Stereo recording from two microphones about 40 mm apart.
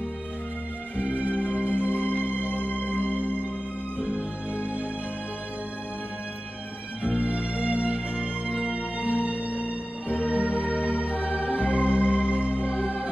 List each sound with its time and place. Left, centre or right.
0.9 s music: right
2.5 s music: left
3.0 s music: right
7.0 s music: right